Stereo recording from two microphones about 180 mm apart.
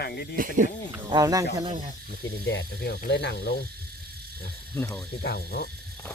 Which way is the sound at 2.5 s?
75° left (ahead or behind).